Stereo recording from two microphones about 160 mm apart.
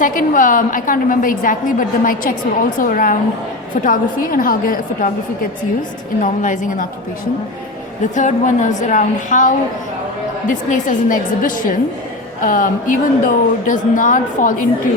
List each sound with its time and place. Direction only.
0.0 s a woman's voice: 55° left (ahead or behind)
6.2 s a woman's voice: 50° left (ahead or behind)
8.1 s a woman's voice: 50° left (ahead or behind)
10.5 s a woman's voice: 55° left (ahead or behind)